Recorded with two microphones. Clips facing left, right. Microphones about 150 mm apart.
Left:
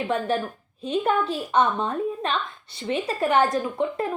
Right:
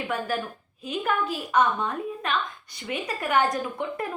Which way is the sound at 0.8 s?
30° left (ahead or behind).